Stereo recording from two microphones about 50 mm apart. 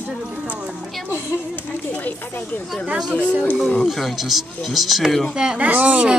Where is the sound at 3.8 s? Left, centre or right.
Centre.